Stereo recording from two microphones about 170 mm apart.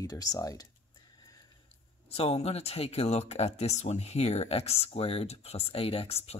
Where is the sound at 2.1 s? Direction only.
35° left (ahead or behind).